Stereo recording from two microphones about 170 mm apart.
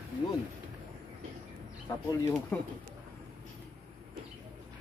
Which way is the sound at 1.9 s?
20° left (ahead or behind).